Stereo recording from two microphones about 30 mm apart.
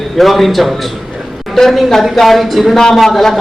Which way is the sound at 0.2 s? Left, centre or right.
Centre.